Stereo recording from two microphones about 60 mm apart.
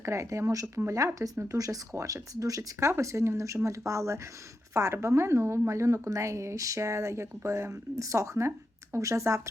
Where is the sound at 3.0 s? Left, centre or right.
Right.